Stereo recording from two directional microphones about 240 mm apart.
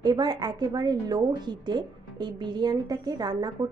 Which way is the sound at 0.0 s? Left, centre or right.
Centre.